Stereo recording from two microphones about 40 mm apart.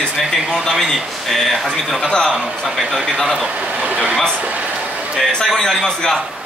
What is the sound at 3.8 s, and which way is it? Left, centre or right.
Speech, right.